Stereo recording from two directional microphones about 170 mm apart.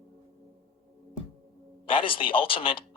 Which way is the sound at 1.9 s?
30° left (ahead or behind).